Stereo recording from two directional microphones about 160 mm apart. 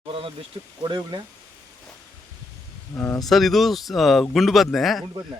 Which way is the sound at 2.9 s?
15° left (ahead or behind).